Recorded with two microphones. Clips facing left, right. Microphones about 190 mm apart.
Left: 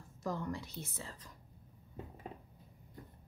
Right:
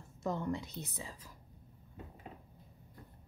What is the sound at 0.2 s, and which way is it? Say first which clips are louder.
Speech: right 3 dB; 25° right (ahead or behind).